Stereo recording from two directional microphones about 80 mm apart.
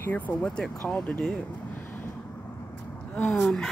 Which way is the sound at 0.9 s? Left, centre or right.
Centre.